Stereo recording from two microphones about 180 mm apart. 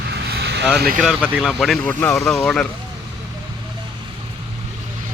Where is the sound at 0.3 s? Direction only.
65° right (ahead or behind).